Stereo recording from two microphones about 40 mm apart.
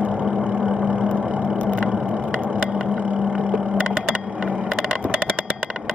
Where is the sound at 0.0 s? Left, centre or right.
Right.